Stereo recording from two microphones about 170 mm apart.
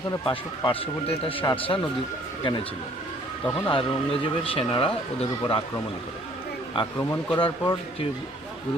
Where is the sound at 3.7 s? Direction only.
30° left (ahead or behind).